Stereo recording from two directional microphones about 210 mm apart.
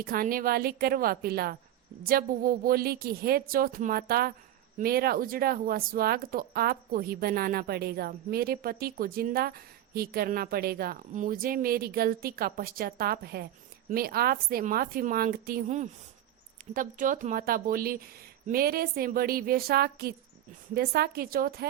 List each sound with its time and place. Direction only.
0.0 s speech: 45° right (ahead or behind)